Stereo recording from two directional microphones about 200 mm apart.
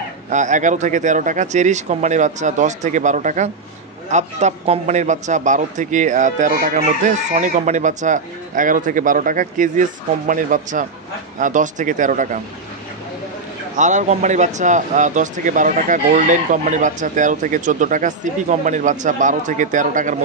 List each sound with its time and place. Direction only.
0.3 s a man's voice: 40° right (ahead or behind)
13.7 s a man's voice: 35° right (ahead or behind)